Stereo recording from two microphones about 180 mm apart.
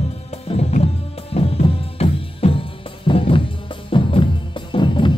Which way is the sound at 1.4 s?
35° left (ahead or behind).